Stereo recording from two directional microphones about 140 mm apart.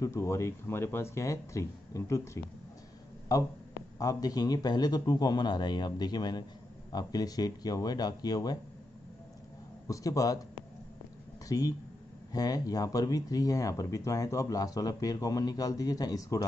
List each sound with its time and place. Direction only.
0.0 s speech: 20° left (ahead or behind)
9.8 s speech: 25° left (ahead or behind)
11.4 s speech: 25° left (ahead or behind)